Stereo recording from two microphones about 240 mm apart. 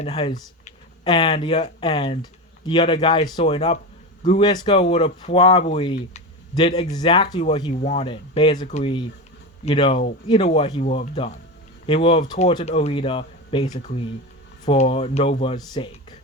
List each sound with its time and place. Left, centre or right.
0.0 s a man's voice: left